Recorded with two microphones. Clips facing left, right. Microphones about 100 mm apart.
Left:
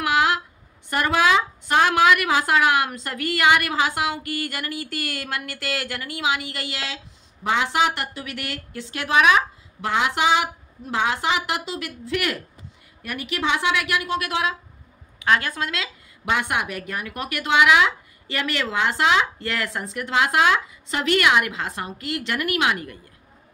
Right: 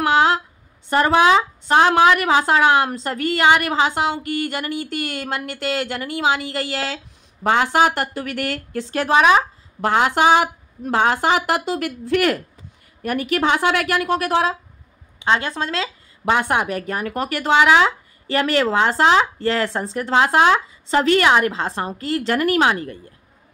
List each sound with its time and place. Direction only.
0.0 s a sound: 30° right (ahead or behind)
0.8 s speech: 30° right (ahead or behind)
15.1 s speech: 25° right (ahead or behind)